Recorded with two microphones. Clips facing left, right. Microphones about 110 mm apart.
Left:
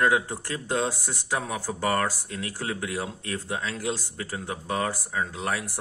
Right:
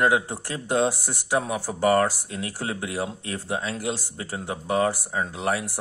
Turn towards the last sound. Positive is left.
turn(degrees=-20)  # may be behind; listen again after turning